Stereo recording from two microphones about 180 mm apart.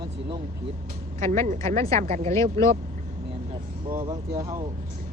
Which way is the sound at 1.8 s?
40° right (ahead or behind).